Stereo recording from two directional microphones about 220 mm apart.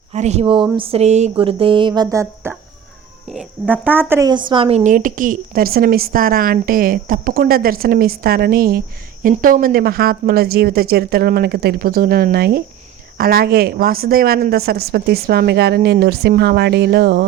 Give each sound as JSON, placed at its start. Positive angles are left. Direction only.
{"t": 0.1, "sound": "speech", "side_deg": -30}